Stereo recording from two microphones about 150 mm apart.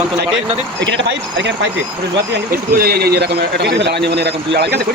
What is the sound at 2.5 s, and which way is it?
A man's voice, 90° right.